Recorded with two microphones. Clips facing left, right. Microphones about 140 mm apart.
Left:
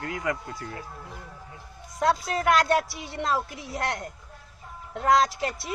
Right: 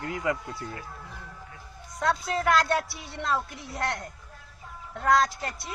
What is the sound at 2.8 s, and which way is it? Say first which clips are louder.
A woman's voice: left 3 dB; centre (ahead or behind).